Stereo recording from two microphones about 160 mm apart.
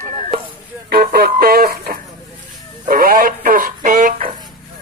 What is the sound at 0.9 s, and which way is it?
Speech, 70° right (ahead or behind).